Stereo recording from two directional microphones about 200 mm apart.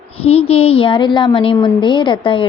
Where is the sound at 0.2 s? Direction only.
30° left (ahead or behind).